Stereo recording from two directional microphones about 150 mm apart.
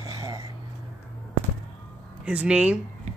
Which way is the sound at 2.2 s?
5° right (ahead or behind).